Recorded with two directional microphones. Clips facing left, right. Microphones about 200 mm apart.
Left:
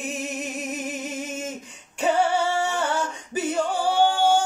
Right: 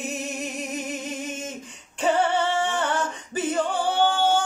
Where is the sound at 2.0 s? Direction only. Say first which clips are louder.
Even; 10° left (ahead or behind).